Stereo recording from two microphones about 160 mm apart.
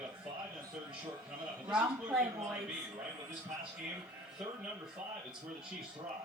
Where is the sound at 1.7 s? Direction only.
10° right (ahead or behind).